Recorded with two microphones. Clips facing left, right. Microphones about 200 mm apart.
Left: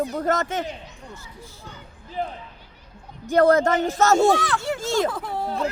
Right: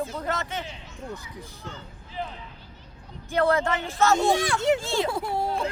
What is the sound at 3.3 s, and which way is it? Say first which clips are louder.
Speech: left 6 dB; 40° left (ahead or behind).